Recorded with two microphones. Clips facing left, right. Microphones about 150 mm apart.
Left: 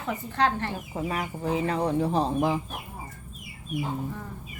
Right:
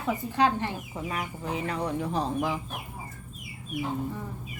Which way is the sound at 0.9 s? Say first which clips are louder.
Left 3 dB; 30° left (ahead or behind).